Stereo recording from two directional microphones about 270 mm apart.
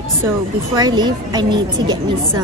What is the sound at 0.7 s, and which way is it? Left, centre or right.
Speech, centre.